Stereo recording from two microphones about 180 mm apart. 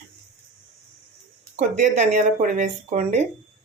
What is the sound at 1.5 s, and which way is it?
Speech, 40° right (ahead or behind).